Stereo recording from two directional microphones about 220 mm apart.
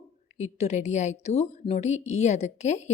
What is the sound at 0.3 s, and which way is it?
A woman's voice, 30° left (ahead or behind).